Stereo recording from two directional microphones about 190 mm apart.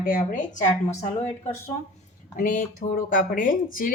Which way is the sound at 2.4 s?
45° left (ahead or behind).